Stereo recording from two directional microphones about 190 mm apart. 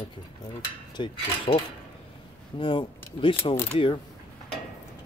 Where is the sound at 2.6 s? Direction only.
25° left (ahead or behind).